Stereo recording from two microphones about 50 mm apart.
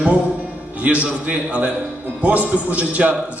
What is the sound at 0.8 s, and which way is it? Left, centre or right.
A man's voice, right.